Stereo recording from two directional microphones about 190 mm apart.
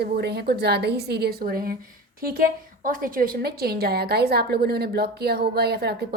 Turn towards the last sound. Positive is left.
turn(degrees=-55)  # may be behind; listen again after turning